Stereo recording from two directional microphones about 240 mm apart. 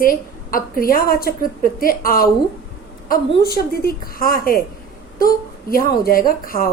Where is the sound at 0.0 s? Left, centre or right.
Left.